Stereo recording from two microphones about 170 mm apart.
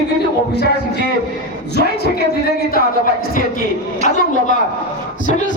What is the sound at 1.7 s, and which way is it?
Speech, 70° left (ahead or behind).